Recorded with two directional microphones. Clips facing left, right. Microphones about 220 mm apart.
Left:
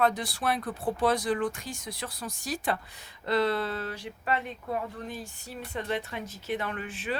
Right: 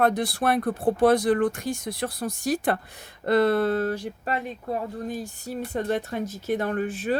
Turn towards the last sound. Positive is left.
turn(degrees=-45)  # may be behind; listen again after turning